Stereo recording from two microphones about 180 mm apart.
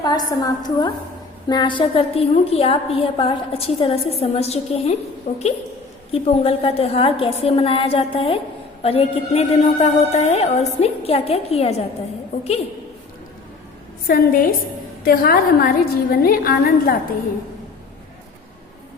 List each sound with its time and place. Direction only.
0.0 s a woman's voice: 20° left (ahead or behind)
6.1 s a woman's voice: 30° left (ahead or behind)
14.1 s a woman's voice: 50° left (ahead or behind)